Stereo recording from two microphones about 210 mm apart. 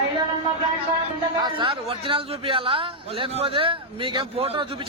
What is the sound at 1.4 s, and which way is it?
A man's voice, 25° right (ahead or behind).